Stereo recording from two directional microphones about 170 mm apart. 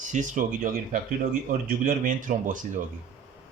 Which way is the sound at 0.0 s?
50° right (ahead or behind).